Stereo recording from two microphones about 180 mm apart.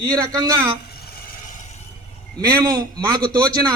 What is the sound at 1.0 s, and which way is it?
Stir, 45° left (ahead or behind).